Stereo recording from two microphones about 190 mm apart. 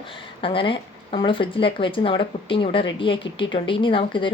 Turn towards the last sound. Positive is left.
turn(degrees=25)  # may be behind; listen again after turning